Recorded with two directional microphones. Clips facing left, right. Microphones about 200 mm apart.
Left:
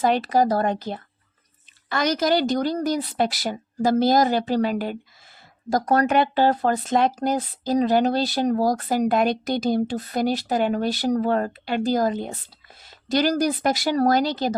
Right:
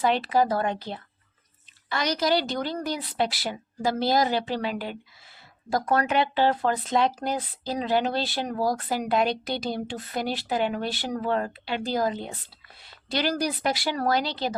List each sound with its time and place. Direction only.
0.0 s speech: 45° left (ahead or behind)